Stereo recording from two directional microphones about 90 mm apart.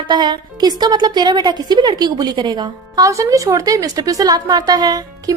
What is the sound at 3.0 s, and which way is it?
A woman's voice, 35° right (ahead or behind).